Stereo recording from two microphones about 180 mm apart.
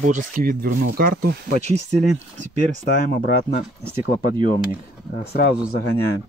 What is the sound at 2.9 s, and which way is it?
Speech, 55° left (ahead or behind).